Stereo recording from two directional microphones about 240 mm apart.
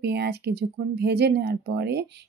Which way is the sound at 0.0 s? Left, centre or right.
Right.